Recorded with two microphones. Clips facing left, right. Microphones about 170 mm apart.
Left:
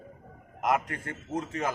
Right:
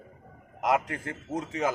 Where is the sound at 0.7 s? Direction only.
20° right (ahead or behind).